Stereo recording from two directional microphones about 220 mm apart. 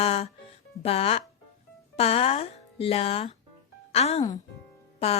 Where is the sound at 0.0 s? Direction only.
25° left (ahead or behind).